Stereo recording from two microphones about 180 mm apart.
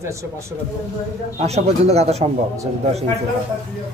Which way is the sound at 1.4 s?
35° right (ahead or behind).